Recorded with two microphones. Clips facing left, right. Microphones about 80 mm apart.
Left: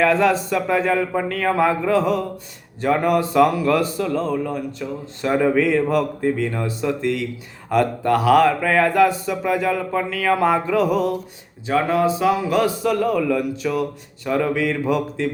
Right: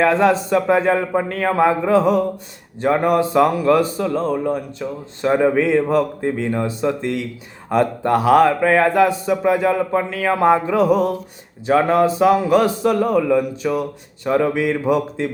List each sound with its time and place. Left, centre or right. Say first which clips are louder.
0.0 s a man's voice: right 2 dB; right
10.8 s a man's voice: right 3 dB; right